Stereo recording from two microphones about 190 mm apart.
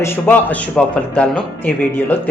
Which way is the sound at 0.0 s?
10° left (ahead or behind).